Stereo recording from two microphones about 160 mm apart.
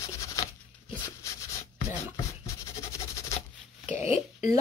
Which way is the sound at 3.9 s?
45° left (ahead or behind).